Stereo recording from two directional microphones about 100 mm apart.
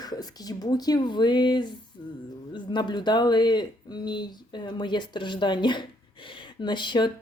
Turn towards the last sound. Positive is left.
turn(degrees=50)  # may be behind; listen again after turning